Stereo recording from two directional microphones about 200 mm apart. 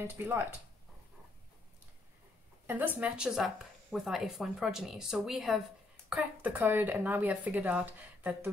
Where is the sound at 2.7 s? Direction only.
10° right (ahead or behind).